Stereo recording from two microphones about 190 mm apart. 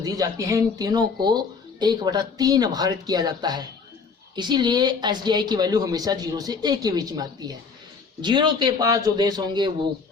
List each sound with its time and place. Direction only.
0.0 s speech: 20° right (ahead or behind)